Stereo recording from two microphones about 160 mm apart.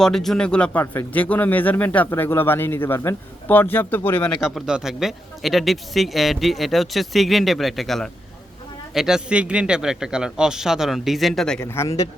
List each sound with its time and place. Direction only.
0.0 s speech: centre (ahead or behind)
4.4 s a man's voice: 5° right (ahead or behind)
11.6 s a man's voice: 20° left (ahead or behind)